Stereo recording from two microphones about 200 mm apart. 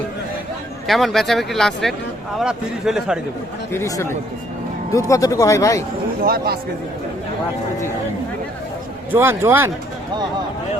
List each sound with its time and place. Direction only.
0.9 s speech: centre (ahead or behind)
3.7 s speech: 15° left (ahead or behind)
6.2 s speech: 50° right (ahead or behind)
9.1 s a man's voice: 10° right (ahead or behind)